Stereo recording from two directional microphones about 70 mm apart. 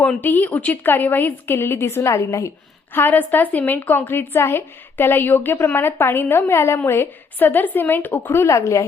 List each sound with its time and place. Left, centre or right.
0.2 s a woman's voice: left
2.9 s a woman's voice: left